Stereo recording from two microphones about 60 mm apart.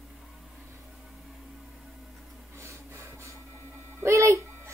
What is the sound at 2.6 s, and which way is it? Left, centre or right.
Rub, right.